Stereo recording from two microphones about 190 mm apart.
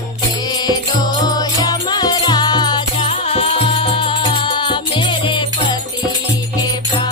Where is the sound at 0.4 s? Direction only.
20° left (ahead or behind).